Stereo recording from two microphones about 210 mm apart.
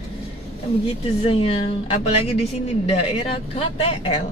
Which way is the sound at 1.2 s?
25° left (ahead or behind).